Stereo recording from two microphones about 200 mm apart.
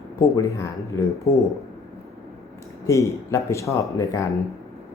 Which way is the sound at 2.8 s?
15° left (ahead or behind).